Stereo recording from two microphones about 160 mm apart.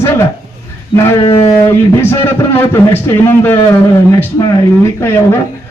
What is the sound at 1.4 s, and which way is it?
A man's voice, 15° left (ahead or behind).